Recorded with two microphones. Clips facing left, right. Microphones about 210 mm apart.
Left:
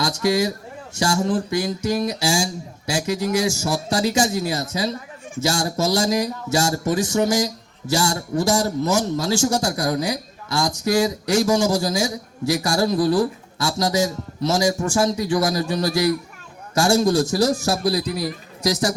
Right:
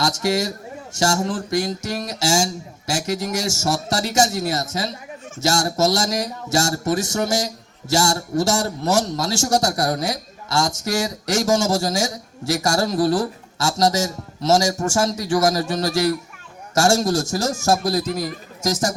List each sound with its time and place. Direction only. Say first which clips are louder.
0.0 s a man's voice: left 1 dB; 45° right (ahead or behind)